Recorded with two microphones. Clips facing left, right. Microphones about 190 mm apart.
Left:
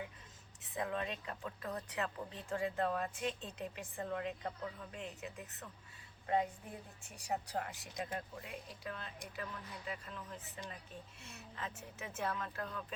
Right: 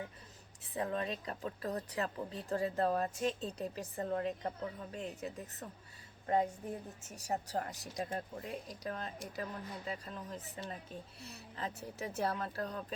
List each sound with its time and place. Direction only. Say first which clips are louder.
0.7 s speech: right 3 dB; 35° right (ahead or behind)